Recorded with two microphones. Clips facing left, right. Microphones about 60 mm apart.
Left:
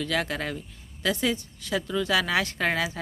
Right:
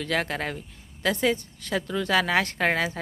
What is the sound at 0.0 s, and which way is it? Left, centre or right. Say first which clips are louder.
A woman's voice: right 1 dB; right.